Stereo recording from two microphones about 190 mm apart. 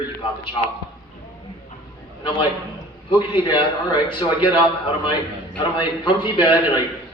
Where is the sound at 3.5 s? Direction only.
25° left (ahead or behind).